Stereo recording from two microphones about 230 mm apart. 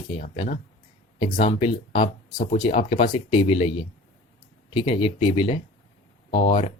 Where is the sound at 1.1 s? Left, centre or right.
Left.